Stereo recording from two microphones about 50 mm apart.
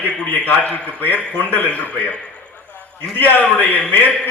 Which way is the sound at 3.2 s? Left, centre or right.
Left.